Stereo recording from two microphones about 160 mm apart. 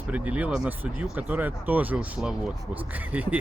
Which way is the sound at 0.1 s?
10° right (ahead or behind).